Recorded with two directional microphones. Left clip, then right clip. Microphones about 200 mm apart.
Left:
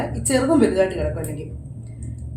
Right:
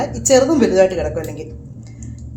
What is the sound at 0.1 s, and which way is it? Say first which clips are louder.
Speech: right 7 dB; 40° right (ahead or behind).